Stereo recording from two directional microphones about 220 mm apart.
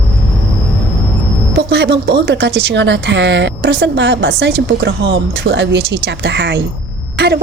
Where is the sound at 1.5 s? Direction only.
50° right (ahead or behind).